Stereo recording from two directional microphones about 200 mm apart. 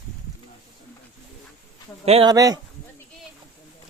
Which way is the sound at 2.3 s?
20° right (ahead or behind).